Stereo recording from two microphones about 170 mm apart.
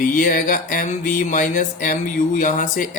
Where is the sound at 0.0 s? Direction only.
55° left (ahead or behind).